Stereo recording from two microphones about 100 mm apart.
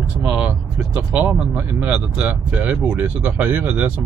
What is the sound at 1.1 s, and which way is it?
Speech, 10° right (ahead or behind).